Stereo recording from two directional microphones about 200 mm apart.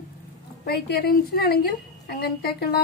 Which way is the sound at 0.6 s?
50° left (ahead or behind).